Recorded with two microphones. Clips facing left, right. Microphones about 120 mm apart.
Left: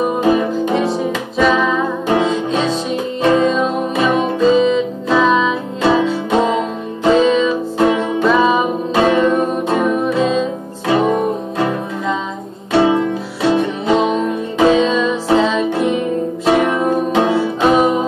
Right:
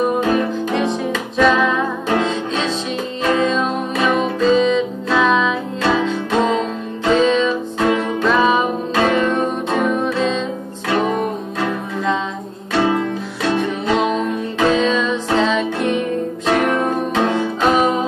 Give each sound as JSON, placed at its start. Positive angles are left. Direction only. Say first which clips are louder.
{"t": 0.2, "sound": "music", "louder": "left 3 dB", "side_deg": 10}
{"t": 7.8, "sound": "music", "louder": "left 3 dB", "side_deg": 20}
{"t": 8.3, "sound": "music", "louder": "left 2 dB", "side_deg": 5}